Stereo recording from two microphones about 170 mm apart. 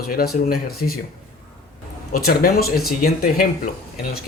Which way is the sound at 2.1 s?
60° left (ahead or behind).